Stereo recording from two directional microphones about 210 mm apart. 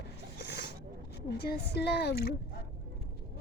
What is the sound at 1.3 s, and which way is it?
Speech, 50° left (ahead or behind).